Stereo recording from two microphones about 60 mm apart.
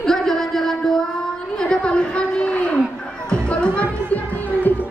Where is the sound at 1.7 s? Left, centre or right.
Centre.